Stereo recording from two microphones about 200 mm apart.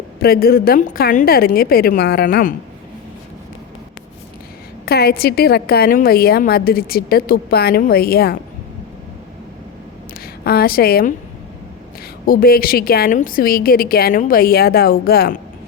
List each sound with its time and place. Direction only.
0.2 s a woman's voice: 50° left (ahead or behind)
4.9 s a woman's voice: 50° left (ahead or behind)
10.2 s a woman's voice: 50° left (ahead or behind)
12.2 s a woman's voice: 45° left (ahead or behind)